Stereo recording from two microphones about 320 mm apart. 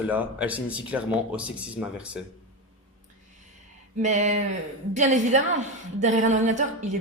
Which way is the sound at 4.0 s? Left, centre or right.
Right.